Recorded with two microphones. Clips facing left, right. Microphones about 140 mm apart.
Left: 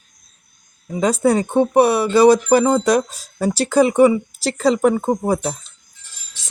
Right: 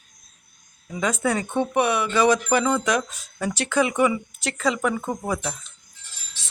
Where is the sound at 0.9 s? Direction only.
35° left (ahead or behind).